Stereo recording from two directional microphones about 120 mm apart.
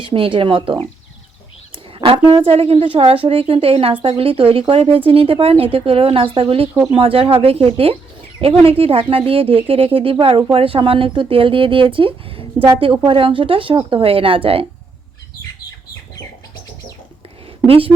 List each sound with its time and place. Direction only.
0.0 s a woman's voice: 45° right (ahead or behind)
2.0 s a woman's voice: 40° right (ahead or behind)
17.7 s a woman's voice: 50° right (ahead or behind)